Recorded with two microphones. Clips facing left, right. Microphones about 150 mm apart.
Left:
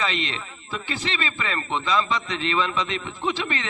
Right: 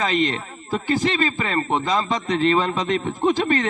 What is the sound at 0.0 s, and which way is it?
A man's voice, 45° right (ahead or behind).